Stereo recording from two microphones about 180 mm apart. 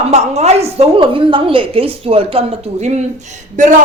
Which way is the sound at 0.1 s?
40° right (ahead or behind).